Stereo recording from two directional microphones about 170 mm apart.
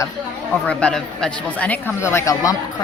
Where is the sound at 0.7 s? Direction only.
5° left (ahead or behind).